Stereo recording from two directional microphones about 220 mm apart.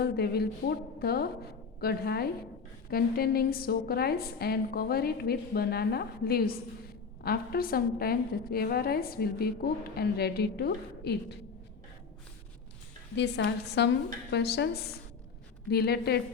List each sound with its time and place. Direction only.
0.0 s a woman's voice: 45° left (ahead or behind)
13.1 s a woman's voice: 50° left (ahead or behind)